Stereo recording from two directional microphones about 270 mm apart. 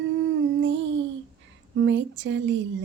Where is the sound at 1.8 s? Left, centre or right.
Right.